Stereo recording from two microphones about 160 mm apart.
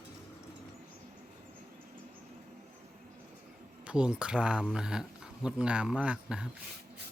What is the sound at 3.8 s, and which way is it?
Speech, 5° right (ahead or behind).